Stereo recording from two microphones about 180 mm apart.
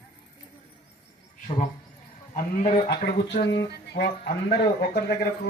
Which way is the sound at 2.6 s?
40° left (ahead or behind).